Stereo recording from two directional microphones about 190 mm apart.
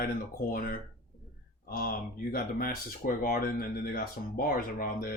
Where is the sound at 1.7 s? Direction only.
50° left (ahead or behind).